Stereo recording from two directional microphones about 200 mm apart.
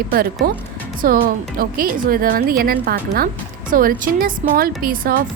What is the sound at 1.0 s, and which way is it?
Speech, 45° right (ahead or behind).